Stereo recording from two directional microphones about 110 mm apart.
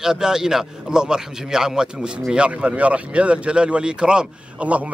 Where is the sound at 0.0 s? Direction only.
5° right (ahead or behind).